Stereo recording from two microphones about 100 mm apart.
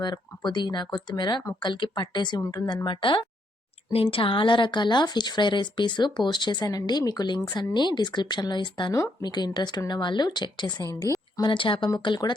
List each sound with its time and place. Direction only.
0.0 s a woman's voice: 45° left (ahead or behind)
2.8 s speech: 55° left (ahead or behind)
11.4 s speech: 60° left (ahead or behind)